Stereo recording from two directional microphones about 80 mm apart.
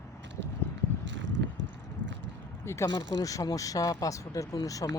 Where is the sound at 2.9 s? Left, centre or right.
Left.